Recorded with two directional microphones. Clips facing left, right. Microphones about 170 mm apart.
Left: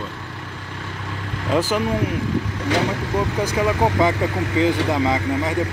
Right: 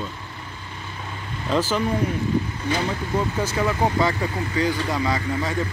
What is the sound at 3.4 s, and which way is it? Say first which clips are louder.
Speech: left 3 dB; 15° left (ahead or behind).